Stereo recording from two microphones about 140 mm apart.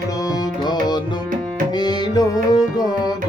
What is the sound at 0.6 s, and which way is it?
Music, 30° left (ahead or behind).